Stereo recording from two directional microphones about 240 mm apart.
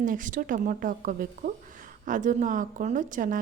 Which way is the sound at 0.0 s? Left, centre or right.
Right.